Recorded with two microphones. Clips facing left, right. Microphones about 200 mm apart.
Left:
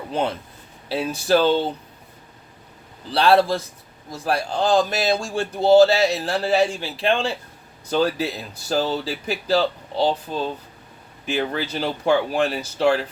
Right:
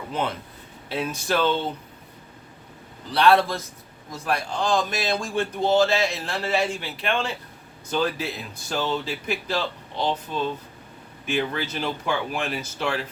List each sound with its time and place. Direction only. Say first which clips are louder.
0.1 s a man's voice: left 4 dB; 30° left (ahead or behind)
3.1 s a man's voice: left 2 dB; 30° left (ahead or behind)